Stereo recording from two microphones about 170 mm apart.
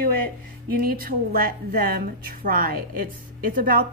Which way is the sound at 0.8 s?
60° right (ahead or behind).